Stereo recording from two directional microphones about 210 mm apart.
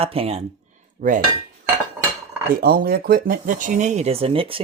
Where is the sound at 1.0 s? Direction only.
40° right (ahead or behind).